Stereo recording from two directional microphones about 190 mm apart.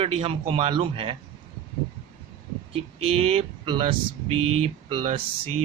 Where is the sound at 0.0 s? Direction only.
30° right (ahead or behind).